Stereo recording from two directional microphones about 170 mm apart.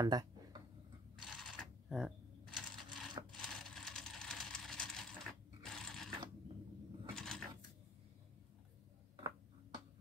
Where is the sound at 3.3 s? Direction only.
5° left (ahead or behind).